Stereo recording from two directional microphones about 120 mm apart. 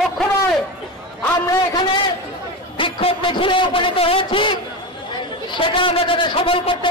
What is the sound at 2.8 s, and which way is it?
A man's voice, 50° left (ahead or behind).